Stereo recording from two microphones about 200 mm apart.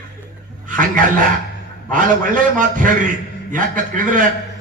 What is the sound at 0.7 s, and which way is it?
A man's voice, 40° right (ahead or behind).